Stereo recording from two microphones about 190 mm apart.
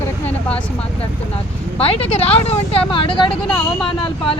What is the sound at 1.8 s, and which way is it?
A woman's voice, 30° left (ahead or behind).